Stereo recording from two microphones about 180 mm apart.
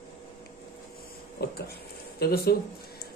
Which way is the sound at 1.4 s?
65° left (ahead or behind).